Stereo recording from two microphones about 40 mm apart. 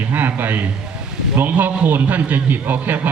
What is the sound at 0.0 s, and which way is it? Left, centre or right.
A man's voice, right.